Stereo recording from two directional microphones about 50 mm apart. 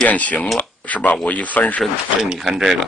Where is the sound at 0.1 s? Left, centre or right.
Left.